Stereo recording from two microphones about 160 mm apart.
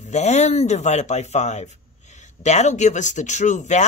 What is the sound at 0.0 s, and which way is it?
Speech, 45° left (ahead or behind).